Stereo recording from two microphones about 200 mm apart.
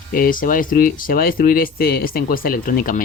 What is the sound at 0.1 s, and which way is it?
Speech, 45° left (ahead or behind).